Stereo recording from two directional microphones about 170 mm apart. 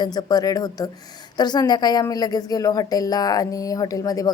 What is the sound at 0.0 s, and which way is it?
A woman's voice, 25° left (ahead or behind).